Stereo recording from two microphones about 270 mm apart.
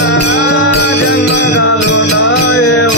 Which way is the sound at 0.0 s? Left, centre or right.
Left.